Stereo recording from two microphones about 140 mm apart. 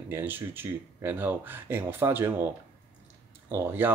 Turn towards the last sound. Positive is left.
turn(degrees=-15)  # may be behind; listen again after turning